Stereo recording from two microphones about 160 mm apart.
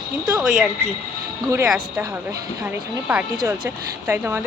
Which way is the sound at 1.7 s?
Centre (ahead or behind).